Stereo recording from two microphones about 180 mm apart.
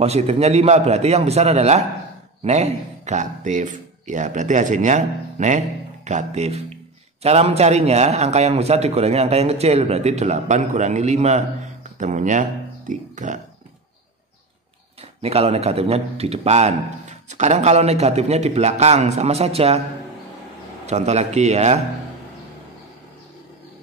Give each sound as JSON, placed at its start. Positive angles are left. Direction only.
{"t": 0.0, "sound": "a man's voice", "side_deg": -35}
{"t": 15.2, "sound": "a man's voice", "side_deg": -35}
{"t": 20.8, "sound": "a man's voice", "side_deg": -40}